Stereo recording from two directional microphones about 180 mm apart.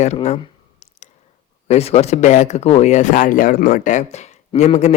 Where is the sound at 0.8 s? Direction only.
35° left (ahead or behind).